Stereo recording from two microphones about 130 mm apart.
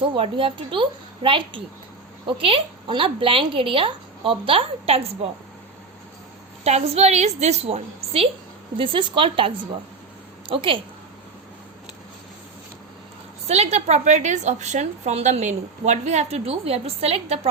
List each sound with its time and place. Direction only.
0.0 s a woman's voice: 40° right (ahead or behind)
6.7 s a woman's voice: 55° right (ahead or behind)
10.5 s a woman's voice: 40° right (ahead or behind)
13.5 s a woman's voice: 55° right (ahead or behind)